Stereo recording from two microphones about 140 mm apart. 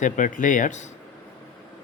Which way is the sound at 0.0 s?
70° left (ahead or behind).